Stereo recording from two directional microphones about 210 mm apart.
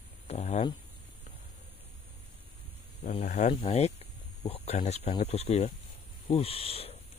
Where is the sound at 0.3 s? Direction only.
30° left (ahead or behind).